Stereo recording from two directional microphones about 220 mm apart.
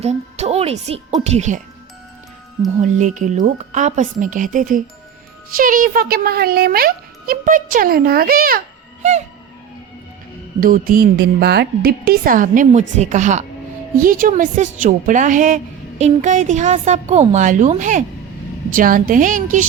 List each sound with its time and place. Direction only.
0.0 s a woman's voice: 30° right (ahead or behind)
3.0 s a woman's voice: 35° right (ahead or behind)
10.6 s a child's voice: 40° right (ahead or behind)